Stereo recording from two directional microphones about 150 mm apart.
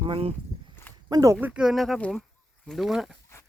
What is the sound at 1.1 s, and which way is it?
Speech, 25° right (ahead or behind).